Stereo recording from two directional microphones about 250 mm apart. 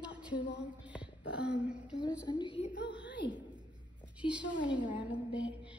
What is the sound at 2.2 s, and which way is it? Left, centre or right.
Speech, centre.